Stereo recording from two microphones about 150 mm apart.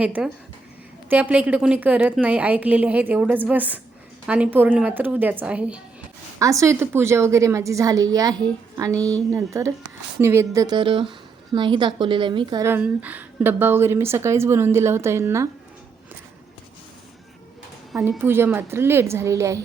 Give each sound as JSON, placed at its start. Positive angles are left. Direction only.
{"t": 0.0, "sound": "a woman's voice", "side_deg": -10}
{"t": 6.4, "sound": "a woman's voice", "side_deg": -20}
{"t": 12.6, "sound": "a woman's voice", "side_deg": -10}
{"t": 18.2, "sound": "a woman's voice", "side_deg": -15}